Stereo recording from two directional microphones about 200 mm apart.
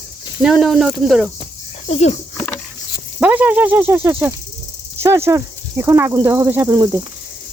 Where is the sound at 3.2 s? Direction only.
5° right (ahead or behind).